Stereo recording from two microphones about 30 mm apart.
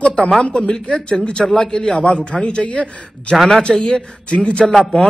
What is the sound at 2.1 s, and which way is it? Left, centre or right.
A man's voice, left.